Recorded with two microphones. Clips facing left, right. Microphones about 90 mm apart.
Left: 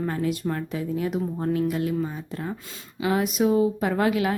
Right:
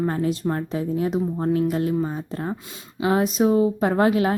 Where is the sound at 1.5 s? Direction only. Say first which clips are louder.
Right 3 dB; 35° right (ahead or behind).